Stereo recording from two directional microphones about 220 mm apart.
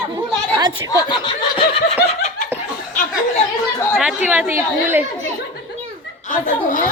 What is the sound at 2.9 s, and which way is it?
Speech, 35° left (ahead or behind).